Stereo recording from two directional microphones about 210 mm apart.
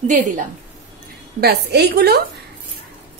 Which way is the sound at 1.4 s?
50° right (ahead or behind).